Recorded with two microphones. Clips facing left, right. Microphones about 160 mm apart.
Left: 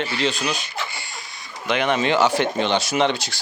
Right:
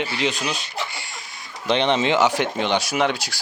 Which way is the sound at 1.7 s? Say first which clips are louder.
Right 1 dB; 25° right (ahead or behind).